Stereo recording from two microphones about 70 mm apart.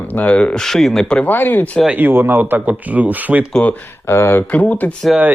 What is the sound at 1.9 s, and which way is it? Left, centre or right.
Speech, right.